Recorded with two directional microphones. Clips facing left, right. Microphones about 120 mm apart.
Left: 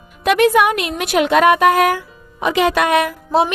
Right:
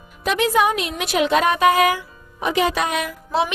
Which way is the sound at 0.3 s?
65° left (ahead or behind).